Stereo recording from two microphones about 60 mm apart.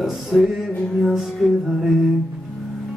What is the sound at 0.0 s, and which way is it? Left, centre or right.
Music, centre.